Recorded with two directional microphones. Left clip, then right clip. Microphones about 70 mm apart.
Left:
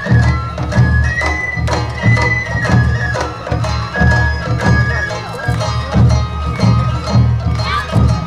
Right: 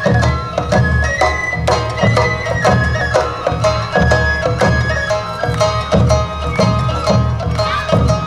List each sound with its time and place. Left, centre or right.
0.0 s music: right